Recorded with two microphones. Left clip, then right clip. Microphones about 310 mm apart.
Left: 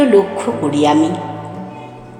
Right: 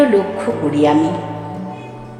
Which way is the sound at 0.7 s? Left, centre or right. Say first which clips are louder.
Left 1 dB; centre.